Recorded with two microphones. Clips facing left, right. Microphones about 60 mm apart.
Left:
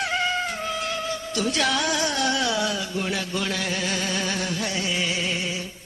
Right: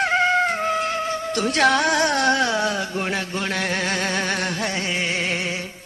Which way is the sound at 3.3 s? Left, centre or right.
Right.